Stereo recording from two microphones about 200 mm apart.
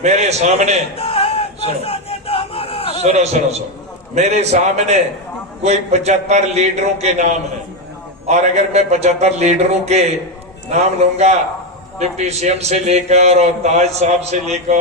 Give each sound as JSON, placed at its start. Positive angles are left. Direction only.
{"t": 0.0, "sound": "a man's voice", "side_deg": -35}
{"t": 0.9, "sound": "a sound", "side_deg": 30}
{"t": 3.0, "sound": "a man's voice", "side_deg": -35}